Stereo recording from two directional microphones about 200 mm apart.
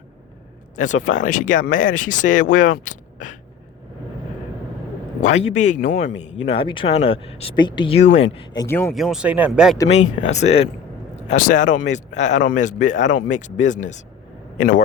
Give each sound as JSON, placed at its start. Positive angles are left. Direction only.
{"t": 0.8, "sound": "speech", "side_deg": 40}
{"t": 5.2, "sound": "speech", "side_deg": 30}
{"t": 8.6, "sound": "speech", "side_deg": 10}
{"t": 8.9, "sound": "speech", "side_deg": 0}
{"t": 9.9, "sound": "speech", "side_deg": 35}